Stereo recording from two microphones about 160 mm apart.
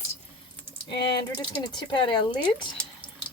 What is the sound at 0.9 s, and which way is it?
Speech, 25° left (ahead or behind).